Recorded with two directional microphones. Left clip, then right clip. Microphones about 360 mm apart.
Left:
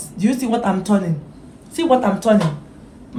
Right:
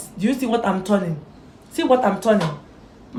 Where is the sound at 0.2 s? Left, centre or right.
Centre.